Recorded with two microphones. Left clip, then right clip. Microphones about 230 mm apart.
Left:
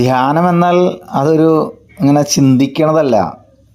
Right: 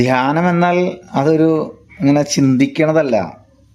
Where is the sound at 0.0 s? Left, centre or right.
Centre.